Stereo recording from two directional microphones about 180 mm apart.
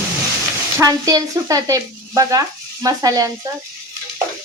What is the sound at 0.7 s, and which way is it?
Sizzle, 20° right (ahead or behind).